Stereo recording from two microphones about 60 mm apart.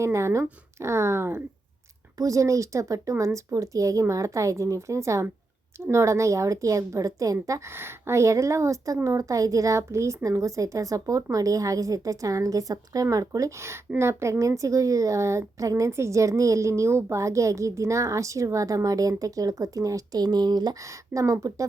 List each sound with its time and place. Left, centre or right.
0.0 s speech: right
2.1 s a woman's voice: right
7.7 s a woman's voice: right
9.0 s a woman's voice: right
14.0 s a woman's voice: right